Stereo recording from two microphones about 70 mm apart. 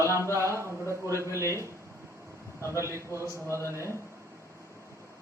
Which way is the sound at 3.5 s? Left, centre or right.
Left.